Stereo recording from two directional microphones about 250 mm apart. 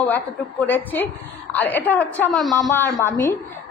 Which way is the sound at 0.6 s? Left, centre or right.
Centre.